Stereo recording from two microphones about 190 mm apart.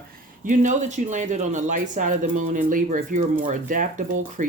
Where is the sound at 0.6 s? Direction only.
40° right (ahead or behind).